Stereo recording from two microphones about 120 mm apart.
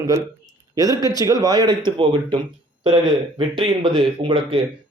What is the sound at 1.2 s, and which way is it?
Speech, 30° right (ahead or behind).